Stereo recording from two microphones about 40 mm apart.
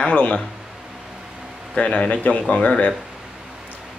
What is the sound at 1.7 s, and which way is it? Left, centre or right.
Speech, left.